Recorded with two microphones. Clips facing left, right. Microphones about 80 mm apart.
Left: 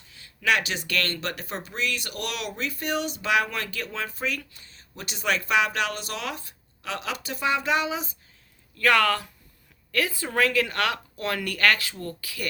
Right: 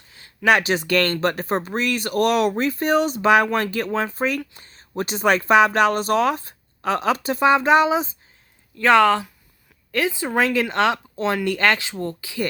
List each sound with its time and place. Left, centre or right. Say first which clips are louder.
0.1 s speech: right 7 dB; right
8.8 s speech: right 6 dB; right